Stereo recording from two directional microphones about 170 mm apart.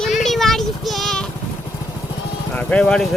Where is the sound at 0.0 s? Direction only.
Centre (ahead or behind).